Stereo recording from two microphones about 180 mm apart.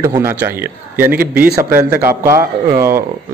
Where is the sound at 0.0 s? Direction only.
15° right (ahead or behind).